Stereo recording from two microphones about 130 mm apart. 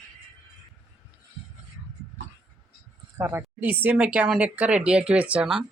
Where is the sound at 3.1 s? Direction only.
20° right (ahead or behind).